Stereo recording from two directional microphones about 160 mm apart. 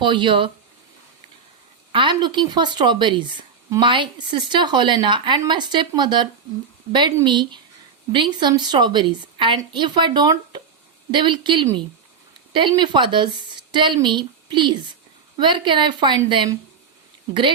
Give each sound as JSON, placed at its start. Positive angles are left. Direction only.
{"t": 0.0, "sound": "speech", "side_deg": -30}
{"t": 1.9, "sound": "a woman's voice", "side_deg": -30}
{"t": 7.3, "sound": "a woman's voice", "side_deg": -30}